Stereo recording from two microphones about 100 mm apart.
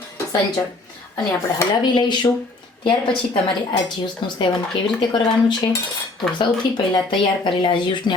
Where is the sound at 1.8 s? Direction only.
50° left (ahead or behind).